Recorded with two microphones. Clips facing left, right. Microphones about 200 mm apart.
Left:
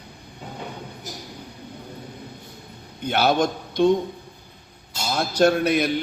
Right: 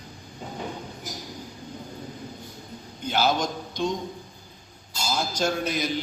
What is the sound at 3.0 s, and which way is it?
Speech, 60° left (ahead or behind).